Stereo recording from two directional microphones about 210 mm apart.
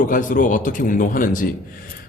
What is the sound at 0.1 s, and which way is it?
A man's voice, 40° left (ahead or behind).